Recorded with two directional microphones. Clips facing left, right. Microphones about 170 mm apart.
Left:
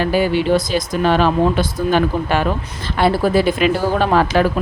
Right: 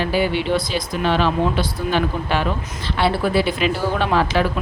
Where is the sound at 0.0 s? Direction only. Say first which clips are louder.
Left 4 dB; 45° left (ahead or behind).